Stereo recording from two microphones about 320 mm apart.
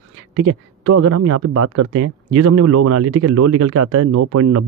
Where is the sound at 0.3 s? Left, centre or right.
Right.